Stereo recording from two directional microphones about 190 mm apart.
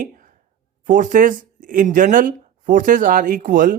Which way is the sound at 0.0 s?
45° right (ahead or behind).